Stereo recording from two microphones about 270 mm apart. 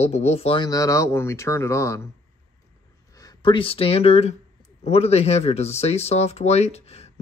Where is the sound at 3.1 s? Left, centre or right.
Centre.